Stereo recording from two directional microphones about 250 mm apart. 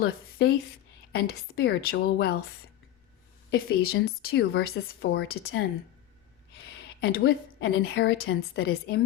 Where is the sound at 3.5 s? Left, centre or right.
Left.